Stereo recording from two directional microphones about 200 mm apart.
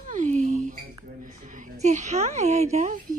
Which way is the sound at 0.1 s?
35° right (ahead or behind).